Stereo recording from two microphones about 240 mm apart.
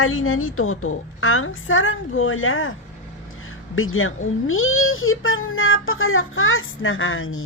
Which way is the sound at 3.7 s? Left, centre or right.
Left.